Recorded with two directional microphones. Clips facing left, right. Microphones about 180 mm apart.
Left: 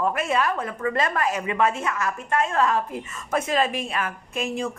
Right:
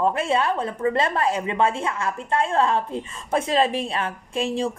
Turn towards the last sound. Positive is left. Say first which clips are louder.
# right 3 dB
turn(degrees=-30)  # may be behind; listen again after turning